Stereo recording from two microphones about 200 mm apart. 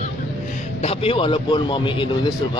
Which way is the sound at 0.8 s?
30° left (ahead or behind).